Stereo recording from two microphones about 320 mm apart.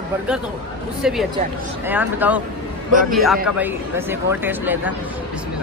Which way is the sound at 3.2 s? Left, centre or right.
Centre.